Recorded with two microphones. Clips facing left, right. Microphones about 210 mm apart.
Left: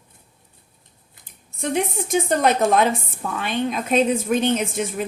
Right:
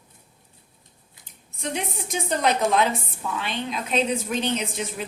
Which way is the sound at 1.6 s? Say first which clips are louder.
Left 7 dB; 50° left (ahead or behind).